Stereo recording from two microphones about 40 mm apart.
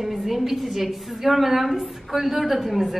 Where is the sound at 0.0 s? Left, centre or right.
Centre.